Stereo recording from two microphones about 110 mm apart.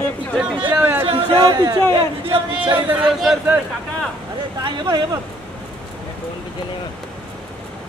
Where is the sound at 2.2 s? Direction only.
55° right (ahead or behind).